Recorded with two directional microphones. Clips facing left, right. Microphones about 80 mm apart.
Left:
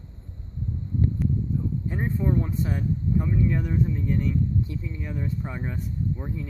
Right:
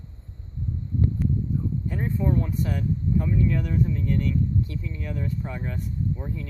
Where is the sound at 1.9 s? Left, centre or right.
Centre.